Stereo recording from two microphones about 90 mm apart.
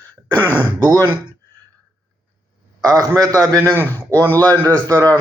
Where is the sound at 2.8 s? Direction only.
45° right (ahead or behind).